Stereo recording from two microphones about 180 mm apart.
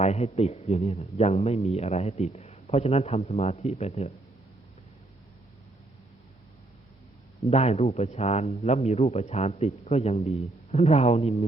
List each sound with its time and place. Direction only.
0.0 s speech: 35° left (ahead or behind)
7.5 s speech: 35° left (ahead or behind)